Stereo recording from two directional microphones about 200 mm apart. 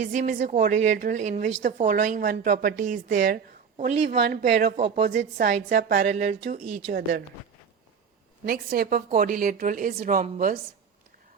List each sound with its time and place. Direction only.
0.0 s a woman's voice: 40° right (ahead or behind)
5.0 s a woman's voice: 60° right (ahead or behind)
5.4 s a woman's voice: 40° right (ahead or behind)
8.4 s a woman's voice: 45° right (ahead or behind)